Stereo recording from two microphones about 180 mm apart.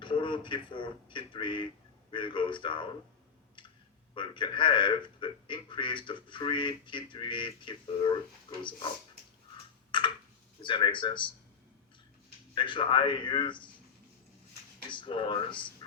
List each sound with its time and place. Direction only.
0.0 s a man's voice: 25° left (ahead or behind)
4.1 s a man's voice: 25° left (ahead or behind)
10.6 s a man's voice: 25° left (ahead or behind)
12.5 s a man's voice: 25° left (ahead or behind)
14.8 s a man's voice: 25° left (ahead or behind)